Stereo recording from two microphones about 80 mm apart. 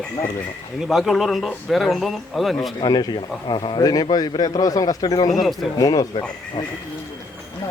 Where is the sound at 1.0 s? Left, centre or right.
Centre.